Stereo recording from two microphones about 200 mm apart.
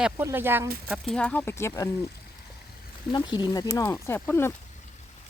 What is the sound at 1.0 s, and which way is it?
Speech, 5° left (ahead or behind).